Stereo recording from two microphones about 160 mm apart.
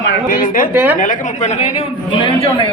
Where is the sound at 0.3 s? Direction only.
60° left (ahead or behind).